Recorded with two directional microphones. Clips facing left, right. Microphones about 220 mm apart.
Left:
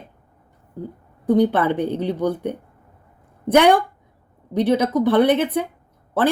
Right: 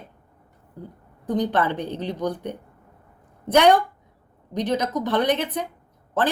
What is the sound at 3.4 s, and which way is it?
Speech, 10° left (ahead or behind).